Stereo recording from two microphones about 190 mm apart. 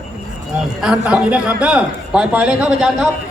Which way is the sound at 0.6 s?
5° right (ahead or behind).